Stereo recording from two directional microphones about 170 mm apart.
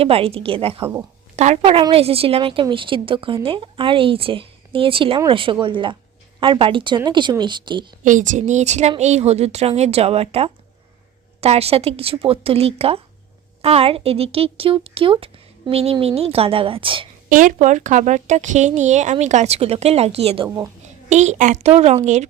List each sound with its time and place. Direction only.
0.0 s a woman's voice: 35° right (ahead or behind)
8.0 s speech: 50° right (ahead or behind); by 17.1 s 30° right (ahead or behind)
17.2 s speech: 50° right (ahead or behind); by 20.7 s 30° right (ahead or behind)
21.1 s speech: 45° right (ahead or behind)